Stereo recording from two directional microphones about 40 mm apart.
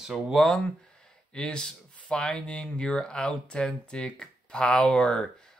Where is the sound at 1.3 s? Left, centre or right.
Left.